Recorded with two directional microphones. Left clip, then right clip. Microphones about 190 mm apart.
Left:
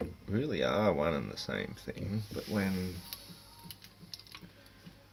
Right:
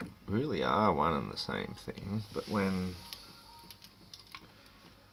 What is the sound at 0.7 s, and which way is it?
Speech, centre (ahead or behind).